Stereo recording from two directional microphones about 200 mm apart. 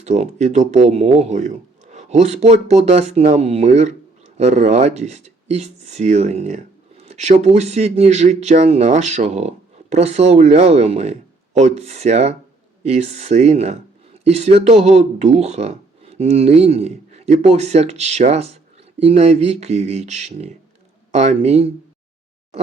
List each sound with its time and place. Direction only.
0.0 s speech: 35° right (ahead or behind)